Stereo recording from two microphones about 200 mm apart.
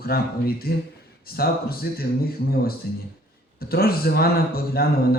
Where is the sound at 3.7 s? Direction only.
50° left (ahead or behind).